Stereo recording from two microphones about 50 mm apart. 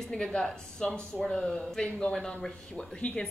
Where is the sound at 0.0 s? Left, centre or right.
Centre.